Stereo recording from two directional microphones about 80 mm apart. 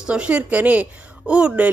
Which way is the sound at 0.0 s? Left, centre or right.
Centre.